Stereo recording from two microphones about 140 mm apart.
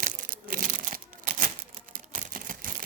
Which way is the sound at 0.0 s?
75° right (ahead or behind).